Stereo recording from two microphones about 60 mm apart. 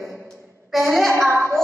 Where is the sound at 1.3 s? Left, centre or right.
Right.